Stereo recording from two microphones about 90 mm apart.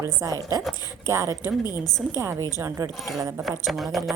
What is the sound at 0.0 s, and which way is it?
A woman's voice, 40° right (ahead or behind).